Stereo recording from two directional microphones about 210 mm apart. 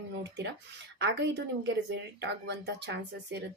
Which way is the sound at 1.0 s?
55° right (ahead or behind).